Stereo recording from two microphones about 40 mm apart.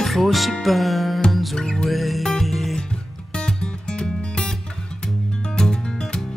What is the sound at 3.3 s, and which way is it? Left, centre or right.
Music, left.